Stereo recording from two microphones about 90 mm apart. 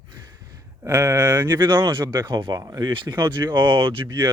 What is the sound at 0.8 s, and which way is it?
Speech, 30° right (ahead or behind).